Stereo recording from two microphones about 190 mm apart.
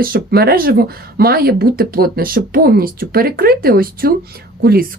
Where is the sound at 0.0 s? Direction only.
55° right (ahead or behind).